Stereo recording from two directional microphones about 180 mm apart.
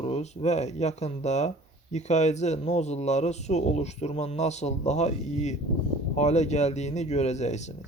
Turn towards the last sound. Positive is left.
turn(degrees=40)  # may be behind; listen again after turning